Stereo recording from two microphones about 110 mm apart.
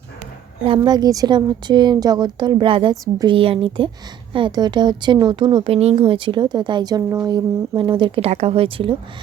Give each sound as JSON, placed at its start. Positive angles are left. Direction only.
{"t": 0.8, "sound": "a woman's voice", "side_deg": -35}
{"t": 2.9, "sound": "a woman's voice", "side_deg": -30}
{"t": 3.2, "sound": "speech", "side_deg": -55}
{"t": 5.7, "sound": "speech", "side_deg": -60}
{"t": 8.3, "sound": "speech", "side_deg": -75}